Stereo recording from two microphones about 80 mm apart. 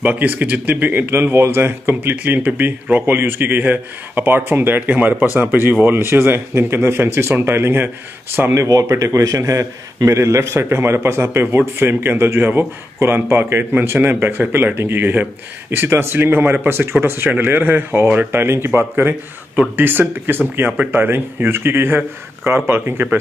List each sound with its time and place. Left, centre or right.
0.0 s speech: right
8.6 s speech: right